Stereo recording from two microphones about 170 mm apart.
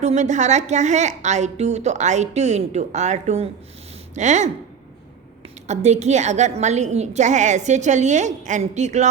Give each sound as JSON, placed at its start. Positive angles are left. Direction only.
{"t": 0.0, "sound": "a woman's voice", "side_deg": -45}
{"t": 5.6, "sound": "a woman's voice", "side_deg": -40}